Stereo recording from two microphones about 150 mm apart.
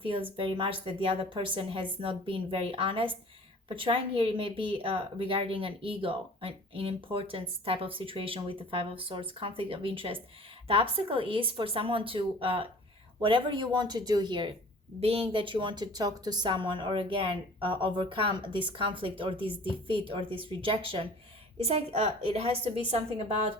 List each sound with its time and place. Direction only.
0.0 s speech: 35° right (ahead or behind)
15.0 s speech: 40° right (ahead or behind)